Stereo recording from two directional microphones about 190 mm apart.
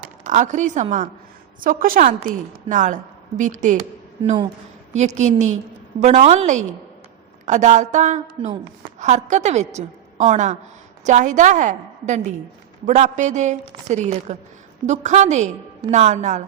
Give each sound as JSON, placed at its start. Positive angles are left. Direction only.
{"t": 0.0, "sound": "a woman's voice", "side_deg": -40}
{"t": 4.9, "sound": "a woman's voice", "side_deg": -40}